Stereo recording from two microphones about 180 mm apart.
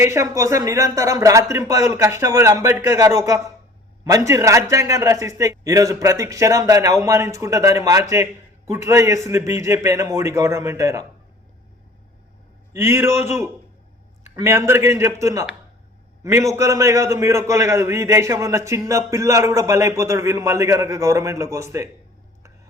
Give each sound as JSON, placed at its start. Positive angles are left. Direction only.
{"t": 0.0, "sound": "a man's voice", "side_deg": -15}
{"t": 12.7, "sound": "a man's voice", "side_deg": -15}
{"t": 14.3, "sound": "a man's voice", "side_deg": -15}